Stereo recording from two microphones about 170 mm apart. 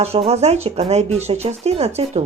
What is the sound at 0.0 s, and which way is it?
Speech, 40° right (ahead or behind).